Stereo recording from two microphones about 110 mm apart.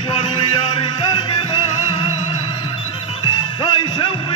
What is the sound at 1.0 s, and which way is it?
Music, 40° left (ahead or behind).